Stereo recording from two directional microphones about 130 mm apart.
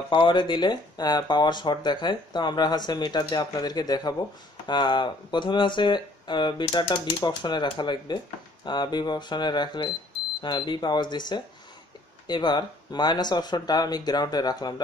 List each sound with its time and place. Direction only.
0.1 s speech: 40° left (ahead or behind)